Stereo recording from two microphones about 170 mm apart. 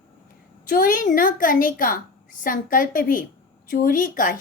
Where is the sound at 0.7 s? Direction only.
55° left (ahead or behind).